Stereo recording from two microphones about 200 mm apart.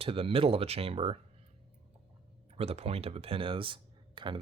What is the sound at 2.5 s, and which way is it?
Speech, 30° right (ahead or behind).